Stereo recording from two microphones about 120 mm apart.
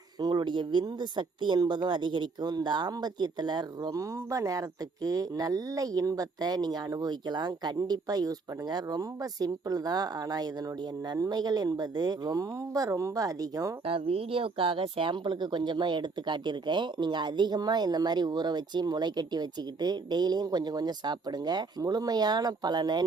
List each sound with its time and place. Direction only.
0.2 s speech: 35° right (ahead or behind)
13.8 s speech: 50° right (ahead or behind); by 23.0 s 35° right (ahead or behind)